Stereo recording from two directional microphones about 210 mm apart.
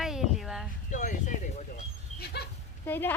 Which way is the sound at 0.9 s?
35° left (ahead or behind).